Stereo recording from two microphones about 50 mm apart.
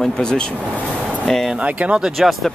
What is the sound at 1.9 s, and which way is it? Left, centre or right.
Speech, centre.